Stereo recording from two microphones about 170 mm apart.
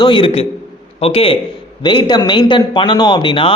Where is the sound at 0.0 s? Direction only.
30° left (ahead or behind).